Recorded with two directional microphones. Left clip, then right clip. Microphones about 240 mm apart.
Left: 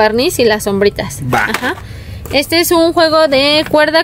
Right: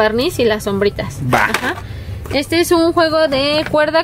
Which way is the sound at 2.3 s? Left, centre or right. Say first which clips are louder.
Left 3 dB; left.